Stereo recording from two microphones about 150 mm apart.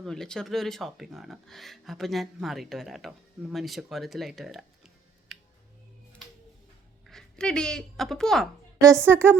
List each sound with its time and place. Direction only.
0.0 s speech: 5° left (ahead or behind)
5.3 s music: centre (ahead or behind)
7.1 s speech: 5° left (ahead or behind)
8.8 s a woman's voice: 20° right (ahead or behind)